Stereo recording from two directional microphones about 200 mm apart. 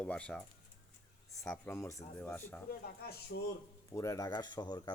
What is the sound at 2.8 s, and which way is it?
Speech, 50° left (ahead or behind).